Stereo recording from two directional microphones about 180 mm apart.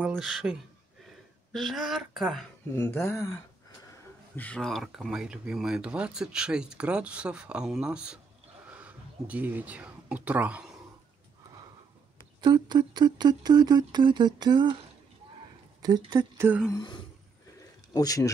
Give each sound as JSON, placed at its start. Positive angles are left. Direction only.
{"t": 0.0, "sound": "speech", "side_deg": -5}
{"t": 2.7, "sound": "speech", "side_deg": 10}
{"t": 4.4, "sound": "speech", "side_deg": 5}
{"t": 8.6, "sound": "a sound", "side_deg": -10}
{"t": 12.4, "sound": "speech", "side_deg": -25}
{"t": 15.8, "sound": "speech", "side_deg": -20}
{"t": 16.7, "sound": "speech", "side_deg": 25}